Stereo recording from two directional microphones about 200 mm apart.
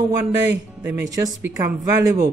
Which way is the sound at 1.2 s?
15° right (ahead or behind).